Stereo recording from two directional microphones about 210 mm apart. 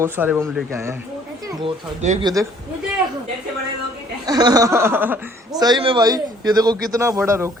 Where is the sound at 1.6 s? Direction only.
35° right (ahead or behind).